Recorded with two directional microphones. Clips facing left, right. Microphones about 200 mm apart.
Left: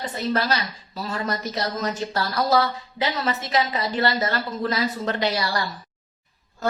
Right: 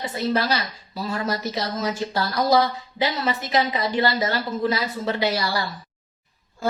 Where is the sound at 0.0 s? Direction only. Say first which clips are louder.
Right 1 dB; 10° right (ahead or behind).